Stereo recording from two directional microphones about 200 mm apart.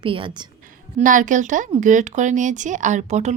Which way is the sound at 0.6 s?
40° right (ahead or behind).